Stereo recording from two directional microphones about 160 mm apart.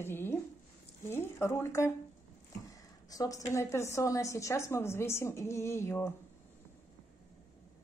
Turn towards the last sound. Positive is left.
turn(degrees=15)  # may be behind; listen again after turning